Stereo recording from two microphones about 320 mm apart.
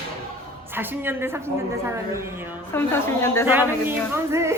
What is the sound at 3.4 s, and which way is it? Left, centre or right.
Speech, centre.